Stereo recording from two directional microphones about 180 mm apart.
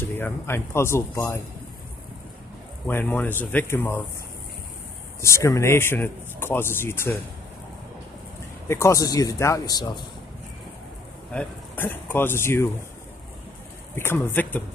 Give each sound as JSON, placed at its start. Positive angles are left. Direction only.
{"t": 0.0, "sound": "speech", "side_deg": 10}
{"t": 2.9, "sound": "speech", "side_deg": 10}
{"t": 5.2, "sound": "speech", "side_deg": 15}
{"t": 8.6, "sound": "a man's voice", "side_deg": 15}
{"t": 11.3, "sound": "speech", "side_deg": 10}
{"t": 13.9, "sound": "speech", "side_deg": 15}